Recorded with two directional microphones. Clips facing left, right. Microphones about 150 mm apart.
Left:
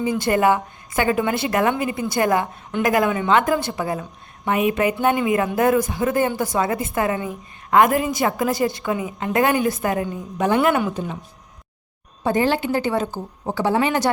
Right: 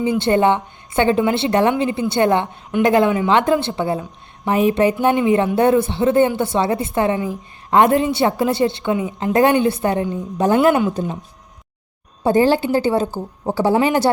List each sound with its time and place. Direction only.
0.0 s a woman's voice: 25° right (ahead or behind)
12.2 s a woman's voice: 35° right (ahead or behind)